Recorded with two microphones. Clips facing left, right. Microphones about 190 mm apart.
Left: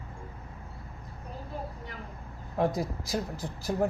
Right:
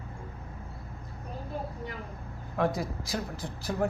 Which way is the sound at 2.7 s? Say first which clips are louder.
Left 2 dB; 40° left (ahead or behind).